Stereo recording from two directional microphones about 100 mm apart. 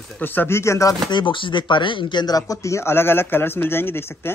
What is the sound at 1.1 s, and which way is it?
Speech, 50° left (ahead or behind).